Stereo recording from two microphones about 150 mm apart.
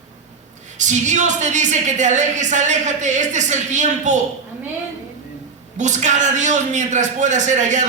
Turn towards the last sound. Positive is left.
turn(degrees=-55)  # may be behind; listen again after turning